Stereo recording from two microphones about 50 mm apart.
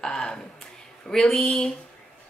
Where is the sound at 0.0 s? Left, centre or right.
Centre.